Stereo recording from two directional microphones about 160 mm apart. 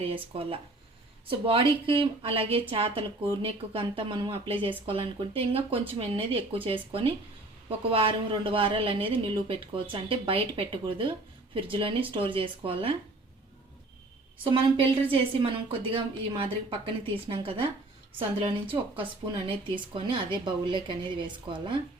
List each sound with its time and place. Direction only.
0.0 s a woman's voice: 35° right (ahead or behind)
14.4 s a woman's voice: 35° right (ahead or behind)